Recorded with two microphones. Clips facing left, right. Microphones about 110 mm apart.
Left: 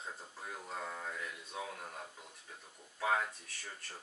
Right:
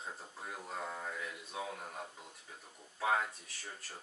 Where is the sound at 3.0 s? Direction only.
10° right (ahead or behind).